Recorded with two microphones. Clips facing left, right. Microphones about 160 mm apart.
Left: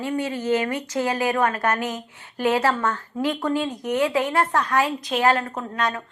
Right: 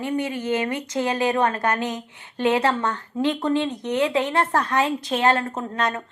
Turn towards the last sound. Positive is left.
turn(degrees=-25)  # may be behind; listen again after turning